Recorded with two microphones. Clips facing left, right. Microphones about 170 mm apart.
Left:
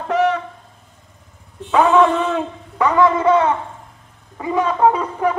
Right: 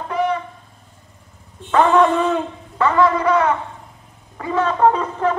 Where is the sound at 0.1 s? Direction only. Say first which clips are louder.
Left 3 dB; 85° left.